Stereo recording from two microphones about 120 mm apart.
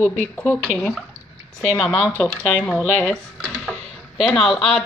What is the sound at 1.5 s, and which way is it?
Speech, 5° left (ahead or behind).